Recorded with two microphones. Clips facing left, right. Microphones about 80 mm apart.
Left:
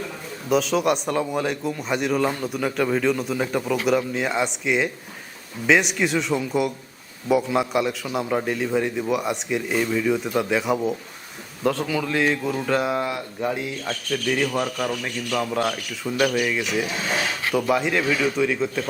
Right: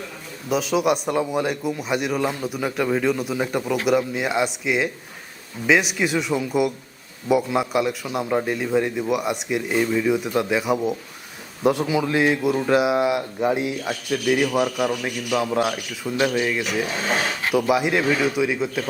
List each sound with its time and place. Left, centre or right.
0.5 s a man's voice: centre
11.6 s speech: centre
17.5 s speech: centre